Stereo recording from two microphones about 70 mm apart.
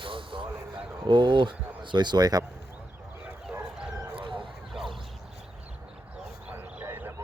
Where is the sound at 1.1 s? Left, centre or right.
Right.